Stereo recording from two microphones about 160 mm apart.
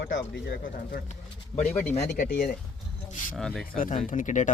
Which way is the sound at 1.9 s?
45° left (ahead or behind).